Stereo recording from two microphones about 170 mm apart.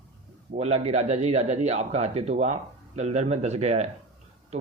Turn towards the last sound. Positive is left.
turn(degrees=-40)  # may be behind; listen again after turning